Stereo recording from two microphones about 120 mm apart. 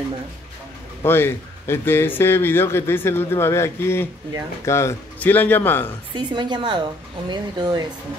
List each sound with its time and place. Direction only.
1.0 s a man's voice: 20° left (ahead or behind)
6.1 s speech: 35° right (ahead or behind)